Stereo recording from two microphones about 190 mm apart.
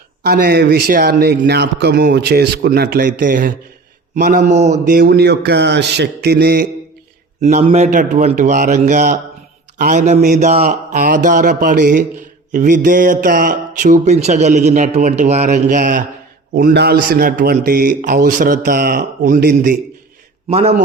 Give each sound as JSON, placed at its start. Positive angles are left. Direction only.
{"t": 0.2, "sound": "speech", "side_deg": -55}
{"t": 4.4, "sound": "a man's voice", "side_deg": -35}
{"t": 4.9, "sound": "speech", "side_deg": -55}
{"t": 7.4, "sound": "a man's voice", "side_deg": -35}
{"t": 16.6, "sound": "speech", "side_deg": -55}
{"t": 20.5, "sound": "a man's voice", "side_deg": -35}